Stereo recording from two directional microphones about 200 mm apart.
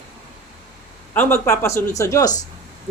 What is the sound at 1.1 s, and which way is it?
Speech, 10° left (ahead or behind).